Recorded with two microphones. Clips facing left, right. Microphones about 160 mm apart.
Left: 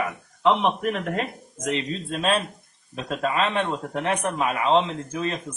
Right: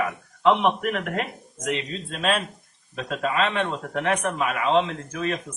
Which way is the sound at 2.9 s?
35° left (ahead or behind).